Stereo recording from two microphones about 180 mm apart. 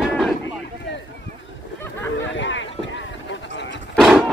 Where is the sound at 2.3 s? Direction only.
90° left.